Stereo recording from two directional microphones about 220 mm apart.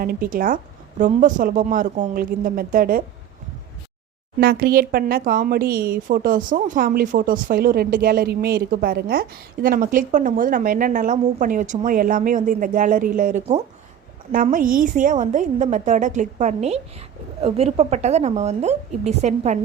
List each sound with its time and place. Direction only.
0.0 s speech: 40° right (ahead or behind)
4.4 s speech: 45° right (ahead or behind); by 19.5 s 30° right (ahead or behind)